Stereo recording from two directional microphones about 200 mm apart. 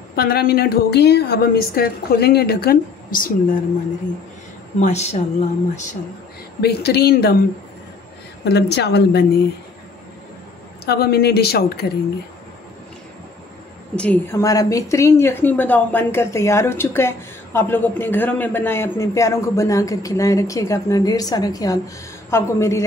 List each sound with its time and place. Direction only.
0.1 s a woman's voice: 50° left (ahead or behind)
4.7 s speech: 35° left (ahead or behind)
6.6 s a woman's voice: 55° left (ahead or behind)
8.5 s a woman's voice: 55° left (ahead or behind)
10.9 s a woman's voice: 55° left (ahead or behind)
13.9 s a woman's voice: 10° left (ahead or behind)